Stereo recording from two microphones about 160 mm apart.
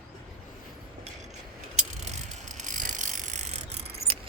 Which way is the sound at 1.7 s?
50° right (ahead or behind).